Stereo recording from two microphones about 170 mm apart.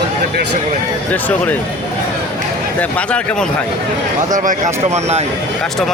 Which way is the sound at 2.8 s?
5° left (ahead or behind).